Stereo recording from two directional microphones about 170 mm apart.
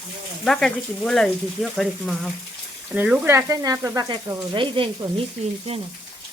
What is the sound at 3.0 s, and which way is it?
Frying, 10° right (ahead or behind).